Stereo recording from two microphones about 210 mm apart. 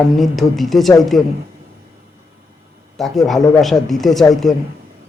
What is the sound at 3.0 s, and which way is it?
Speech, centre (ahead or behind).